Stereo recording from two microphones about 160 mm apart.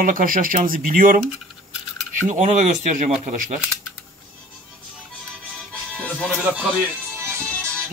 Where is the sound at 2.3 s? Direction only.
50° right (ahead or behind).